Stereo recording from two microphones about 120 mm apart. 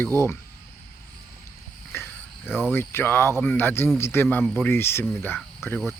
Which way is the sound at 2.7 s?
20° left (ahead or behind).